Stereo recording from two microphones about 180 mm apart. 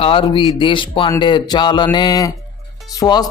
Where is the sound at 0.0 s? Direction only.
30° left (ahead or behind).